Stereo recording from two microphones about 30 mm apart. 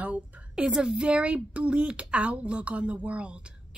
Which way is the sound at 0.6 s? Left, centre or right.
Right.